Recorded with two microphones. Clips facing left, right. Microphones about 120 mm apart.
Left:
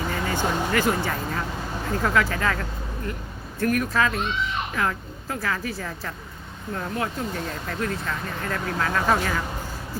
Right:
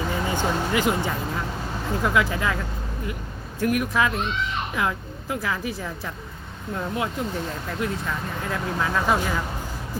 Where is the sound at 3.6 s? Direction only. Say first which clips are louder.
Even; 15° right (ahead or behind).